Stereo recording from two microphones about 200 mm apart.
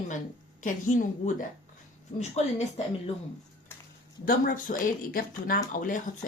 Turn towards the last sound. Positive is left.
turn(degrees=45)  # may be behind; listen again after turning